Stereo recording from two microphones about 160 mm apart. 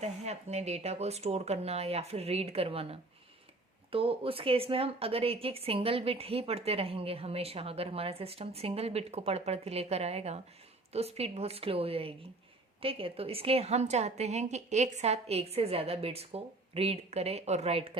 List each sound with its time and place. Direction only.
0.0 s a woman's voice: 45° right (ahead or behind)